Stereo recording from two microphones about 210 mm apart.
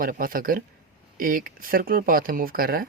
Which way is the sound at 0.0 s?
40° right (ahead or behind).